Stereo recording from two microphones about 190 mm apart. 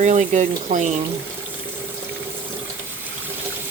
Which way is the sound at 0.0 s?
40° right (ahead or behind).